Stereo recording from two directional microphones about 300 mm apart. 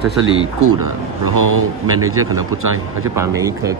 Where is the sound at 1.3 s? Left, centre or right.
Right.